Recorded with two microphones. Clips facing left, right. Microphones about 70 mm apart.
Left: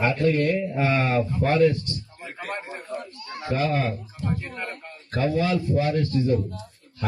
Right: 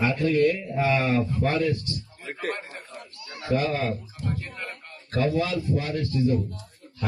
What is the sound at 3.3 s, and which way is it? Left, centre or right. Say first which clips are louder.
Speech: right 2 dB; left.